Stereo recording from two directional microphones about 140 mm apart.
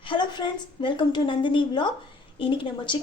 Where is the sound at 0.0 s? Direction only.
35° left (ahead or behind).